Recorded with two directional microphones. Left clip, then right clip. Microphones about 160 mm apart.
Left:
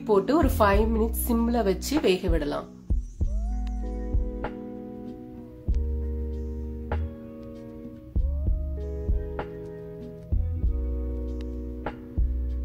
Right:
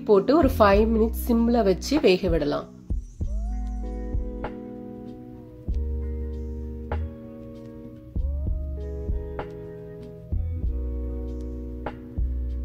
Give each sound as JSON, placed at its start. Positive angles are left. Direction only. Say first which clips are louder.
{"t": 0.0, "sound": "speech", "louder": "right 4 dB", "side_deg": -20}
{"t": 3.8, "sound": "music", "louder": "even", "side_deg": 0}
{"t": 8.8, "sound": "music", "louder": "even", "side_deg": 0}